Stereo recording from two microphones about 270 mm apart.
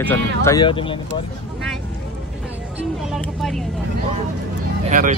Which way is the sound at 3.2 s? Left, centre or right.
Centre.